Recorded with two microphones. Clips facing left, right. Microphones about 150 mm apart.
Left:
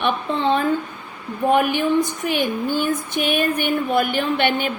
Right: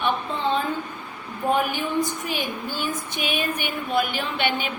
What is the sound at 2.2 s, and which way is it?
Speech, 55° left (ahead or behind).